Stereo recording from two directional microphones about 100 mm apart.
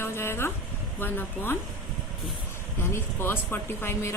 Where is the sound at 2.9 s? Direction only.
25° left (ahead or behind).